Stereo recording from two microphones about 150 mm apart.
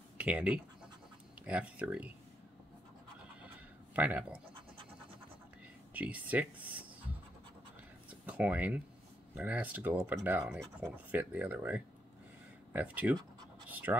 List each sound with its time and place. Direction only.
0.2 s speech: 10° right (ahead or behind)
3.9 s speech: 10° right (ahead or behind)
5.9 s speech: 10° right (ahead or behind)
8.3 s speech: 10° right (ahead or behind)
13.7 s scratch: 10° right (ahead or behind)